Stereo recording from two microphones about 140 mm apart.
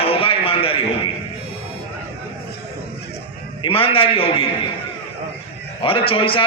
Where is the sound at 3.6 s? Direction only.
40° left (ahead or behind).